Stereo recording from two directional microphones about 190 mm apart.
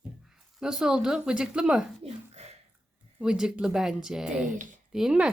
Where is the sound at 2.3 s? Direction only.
35° right (ahead or behind).